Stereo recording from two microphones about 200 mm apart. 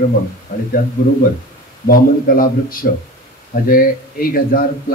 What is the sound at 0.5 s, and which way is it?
A man's voice, 45° left (ahead or behind).